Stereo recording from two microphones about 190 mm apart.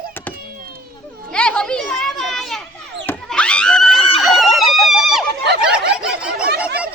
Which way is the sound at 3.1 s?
5° left (ahead or behind).